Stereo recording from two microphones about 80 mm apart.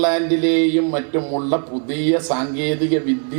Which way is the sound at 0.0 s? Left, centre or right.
Centre.